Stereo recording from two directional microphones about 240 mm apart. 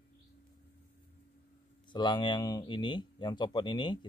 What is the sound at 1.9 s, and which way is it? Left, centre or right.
Speech, centre.